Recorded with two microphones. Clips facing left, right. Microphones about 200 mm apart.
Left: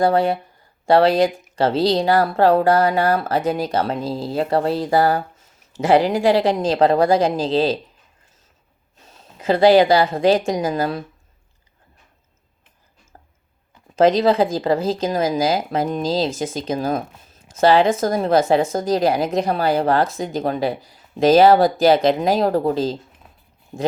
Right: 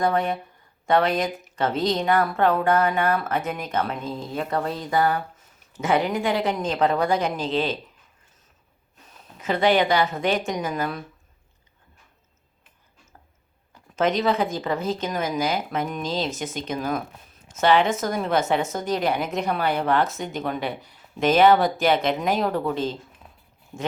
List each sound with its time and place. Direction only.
0.0 s a woman's voice: 30° left (ahead or behind)
9.0 s a woman's voice: 30° left (ahead or behind)
13.9 s a woman's voice: 35° left (ahead or behind)